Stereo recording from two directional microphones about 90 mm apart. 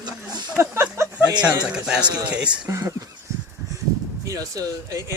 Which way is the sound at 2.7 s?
35° right (ahead or behind).